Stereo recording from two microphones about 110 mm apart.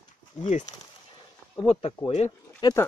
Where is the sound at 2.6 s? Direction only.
40° left (ahead or behind).